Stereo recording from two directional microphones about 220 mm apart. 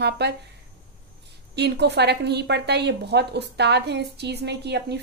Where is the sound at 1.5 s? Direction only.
50° right (ahead or behind).